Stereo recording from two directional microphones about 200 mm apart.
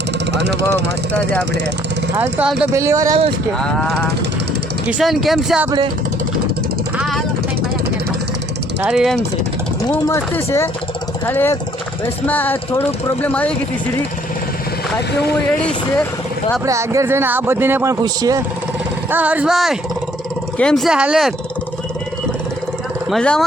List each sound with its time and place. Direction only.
2.1 s speech: 5° right (ahead or behind)
2.7 s speech: 15° right (ahead or behind)
4.9 s speech: 5° right (ahead or behind)
6.9 s vehicle: centre (ahead or behind)
8.8 s speech: centre (ahead or behind)
9.9 s speech: 10° left (ahead or behind)
16.6 s speech: 15° right (ahead or behind)
19.1 s speech: 5° right (ahead or behind)
23.0 s speech: centre (ahead or behind)